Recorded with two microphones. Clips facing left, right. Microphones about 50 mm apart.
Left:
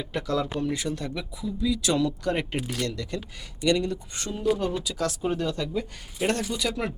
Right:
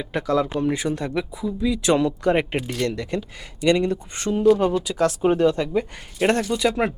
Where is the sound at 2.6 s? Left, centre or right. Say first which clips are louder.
Right 4 dB; centre.